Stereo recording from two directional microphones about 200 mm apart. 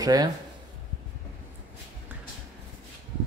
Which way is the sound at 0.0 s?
20° right (ahead or behind).